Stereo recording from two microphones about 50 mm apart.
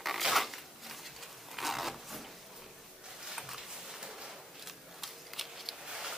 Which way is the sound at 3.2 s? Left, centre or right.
Centre.